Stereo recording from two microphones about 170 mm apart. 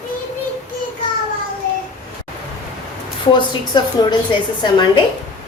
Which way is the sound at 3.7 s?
25° left (ahead or behind).